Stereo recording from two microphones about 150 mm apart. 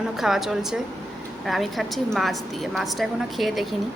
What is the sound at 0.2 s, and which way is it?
A woman's voice, centre (ahead or behind).